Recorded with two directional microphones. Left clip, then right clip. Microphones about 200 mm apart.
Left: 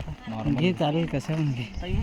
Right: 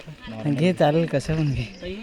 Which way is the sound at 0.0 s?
50° left (ahead or behind).